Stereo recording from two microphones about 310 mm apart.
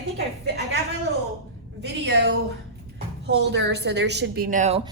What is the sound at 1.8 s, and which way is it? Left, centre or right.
A woman's voice, right.